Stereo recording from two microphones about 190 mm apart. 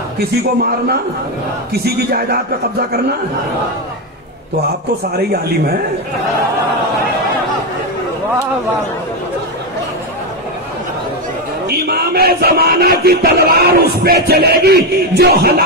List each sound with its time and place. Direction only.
0.2 s speech: 55° right (ahead or behind)
5.1 s speech: 55° right (ahead or behind)
11.6 s speech: 55° right (ahead or behind)